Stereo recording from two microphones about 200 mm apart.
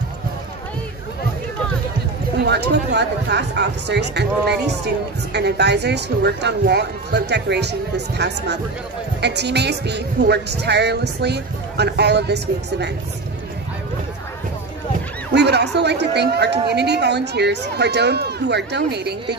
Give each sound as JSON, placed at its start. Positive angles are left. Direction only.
{"t": 2.3, "sound": "speech", "side_deg": -55}
{"t": 15.3, "sound": "speech", "side_deg": -55}